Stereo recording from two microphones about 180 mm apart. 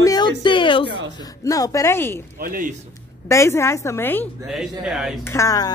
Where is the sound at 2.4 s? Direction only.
50° right (ahead or behind).